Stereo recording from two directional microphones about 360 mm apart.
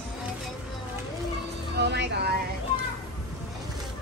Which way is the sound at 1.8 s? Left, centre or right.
Right.